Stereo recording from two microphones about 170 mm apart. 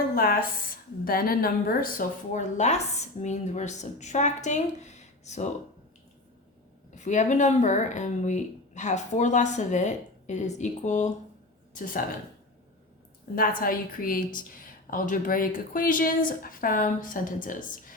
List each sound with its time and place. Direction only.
0.1 s a woman's voice: 60° left (ahead or behind); by 5.5 s 40° left (ahead or behind)
6.9 s a woman's voice: 45° left (ahead or behind)
13.6 s a woman's voice: 55° left (ahead or behind)